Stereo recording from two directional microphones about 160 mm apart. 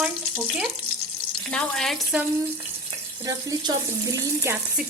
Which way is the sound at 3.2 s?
20° right (ahead or behind).